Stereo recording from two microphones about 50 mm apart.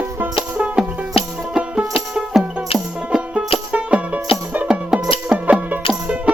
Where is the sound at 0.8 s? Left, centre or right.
Centre.